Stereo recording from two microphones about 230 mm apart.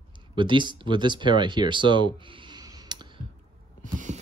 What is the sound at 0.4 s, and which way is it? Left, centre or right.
Speech, right.